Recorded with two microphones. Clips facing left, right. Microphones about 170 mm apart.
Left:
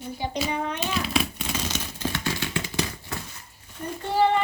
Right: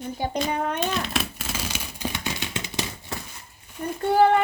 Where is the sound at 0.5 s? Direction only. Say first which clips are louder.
Right 2 dB; 50° right (ahead or behind).